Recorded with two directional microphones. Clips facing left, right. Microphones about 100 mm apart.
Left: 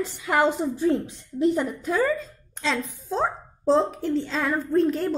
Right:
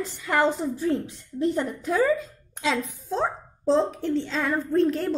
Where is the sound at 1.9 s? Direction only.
Centre (ahead or behind).